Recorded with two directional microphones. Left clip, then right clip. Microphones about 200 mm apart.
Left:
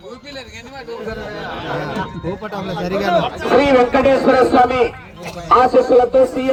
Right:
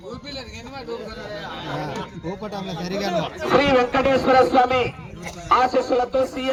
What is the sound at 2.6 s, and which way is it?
Speech, 55° right (ahead or behind).